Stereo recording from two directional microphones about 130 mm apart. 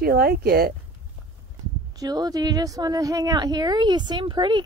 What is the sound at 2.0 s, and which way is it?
Speech, 30° right (ahead or behind).